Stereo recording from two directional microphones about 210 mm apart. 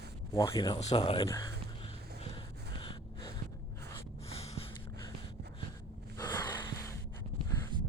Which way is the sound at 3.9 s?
30° left (ahead or behind).